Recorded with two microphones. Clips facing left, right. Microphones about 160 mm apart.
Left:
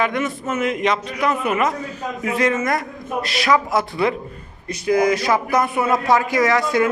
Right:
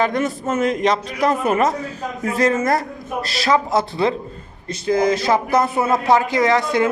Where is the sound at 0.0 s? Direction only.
35° right (ahead or behind).